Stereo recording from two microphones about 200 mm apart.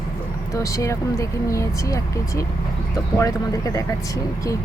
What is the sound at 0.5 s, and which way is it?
Speech, 15° left (ahead or behind).